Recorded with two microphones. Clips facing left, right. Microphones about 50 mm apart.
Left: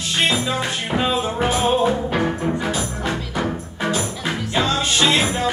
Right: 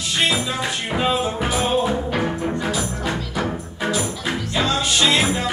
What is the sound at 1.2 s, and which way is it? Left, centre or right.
Music, left.